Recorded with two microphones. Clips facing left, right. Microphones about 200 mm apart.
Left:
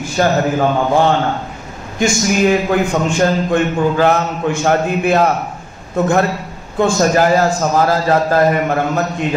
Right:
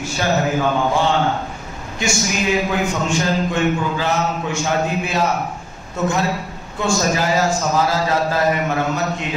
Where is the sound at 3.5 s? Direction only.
55° left (ahead or behind).